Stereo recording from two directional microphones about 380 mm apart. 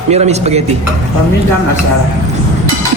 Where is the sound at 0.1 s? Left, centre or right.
Centre.